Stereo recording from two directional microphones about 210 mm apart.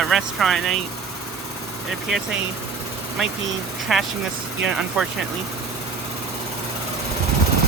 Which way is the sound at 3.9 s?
Centre (ahead or behind).